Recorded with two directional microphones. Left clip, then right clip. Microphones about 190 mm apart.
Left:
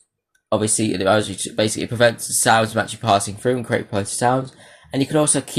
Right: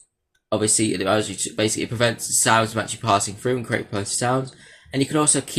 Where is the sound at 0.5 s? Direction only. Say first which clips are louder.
Left 1 dB; 15° left (ahead or behind).